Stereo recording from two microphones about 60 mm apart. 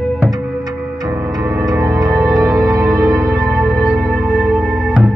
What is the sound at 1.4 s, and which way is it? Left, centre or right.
Music, right.